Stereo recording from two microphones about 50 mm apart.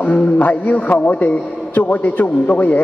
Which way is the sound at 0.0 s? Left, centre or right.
Left.